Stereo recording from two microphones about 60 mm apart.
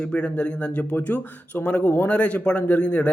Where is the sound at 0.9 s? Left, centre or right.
Left.